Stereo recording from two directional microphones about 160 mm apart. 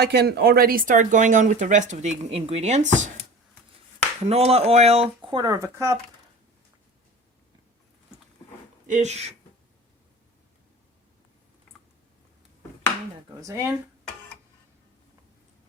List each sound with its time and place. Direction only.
0.0 s speech: 90° right; by 3.1 s 45° right (ahead or behind)
4.2 s speech: 40° right (ahead or behind)
5.6 s speech: 15° right (ahead or behind)
8.9 s speech: 45° right (ahead or behind)
13.4 s speech: 15° right (ahead or behind)